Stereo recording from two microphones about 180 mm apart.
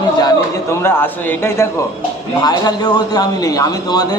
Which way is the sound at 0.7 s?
15° left (ahead or behind).